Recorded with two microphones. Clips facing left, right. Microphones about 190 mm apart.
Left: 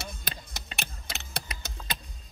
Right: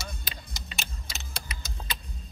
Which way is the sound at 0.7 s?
65° left (ahead or behind).